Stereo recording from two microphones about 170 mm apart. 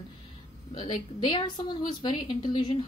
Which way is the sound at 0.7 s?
30° left (ahead or behind).